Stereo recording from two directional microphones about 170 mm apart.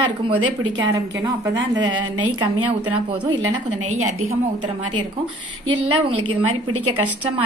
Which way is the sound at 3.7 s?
45° right (ahead or behind).